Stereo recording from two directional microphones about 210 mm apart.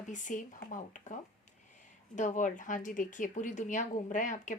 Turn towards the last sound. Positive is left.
turn(degrees=35)  # may be behind; listen again after turning